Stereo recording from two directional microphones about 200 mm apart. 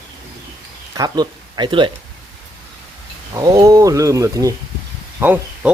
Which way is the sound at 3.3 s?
15° right (ahead or behind).